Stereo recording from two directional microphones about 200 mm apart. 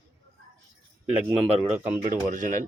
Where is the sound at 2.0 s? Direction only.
40° right (ahead or behind).